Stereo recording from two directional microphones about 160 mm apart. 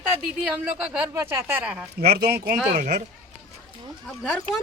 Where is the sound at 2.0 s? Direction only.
85° right.